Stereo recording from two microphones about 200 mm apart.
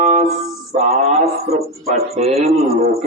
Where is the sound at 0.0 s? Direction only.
35° right (ahead or behind).